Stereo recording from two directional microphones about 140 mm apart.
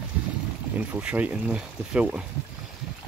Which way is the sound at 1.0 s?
10° right (ahead or behind).